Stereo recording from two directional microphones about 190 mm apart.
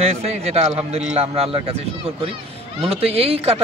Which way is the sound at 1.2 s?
30° right (ahead or behind).